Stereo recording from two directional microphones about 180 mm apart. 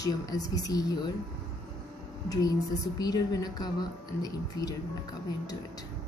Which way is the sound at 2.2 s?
20° left (ahead or behind).